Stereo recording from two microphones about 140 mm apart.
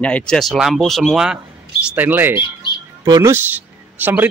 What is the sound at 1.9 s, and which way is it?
Speech, 15° right (ahead or behind).